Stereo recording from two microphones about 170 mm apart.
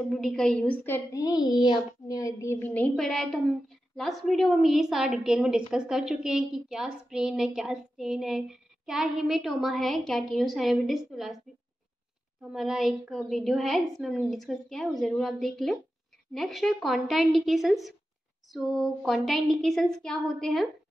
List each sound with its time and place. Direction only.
0.1 s a woman's voice: centre (ahead or behind)
12.5 s a woman's voice: centre (ahead or behind)